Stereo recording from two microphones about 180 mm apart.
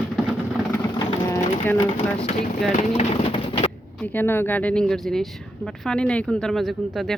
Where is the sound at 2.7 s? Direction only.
35° left (ahead or behind).